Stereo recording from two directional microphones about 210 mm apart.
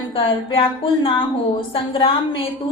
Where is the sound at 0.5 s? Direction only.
25° left (ahead or behind).